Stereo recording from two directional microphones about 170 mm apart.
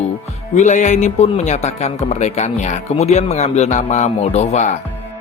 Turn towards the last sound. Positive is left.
turn(degrees=40)  # may be behind; listen again after turning